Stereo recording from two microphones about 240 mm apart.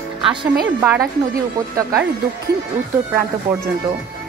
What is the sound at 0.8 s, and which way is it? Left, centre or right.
Speech, centre.